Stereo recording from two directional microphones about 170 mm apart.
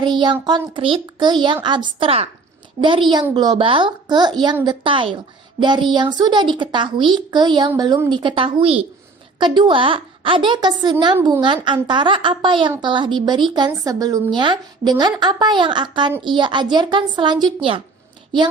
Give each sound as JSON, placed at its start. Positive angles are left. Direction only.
{"t": 0.0, "sound": "speech", "side_deg": -25}